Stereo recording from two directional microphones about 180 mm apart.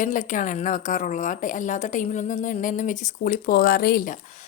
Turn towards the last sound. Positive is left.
turn(degrees=55)  # may be behind; listen again after turning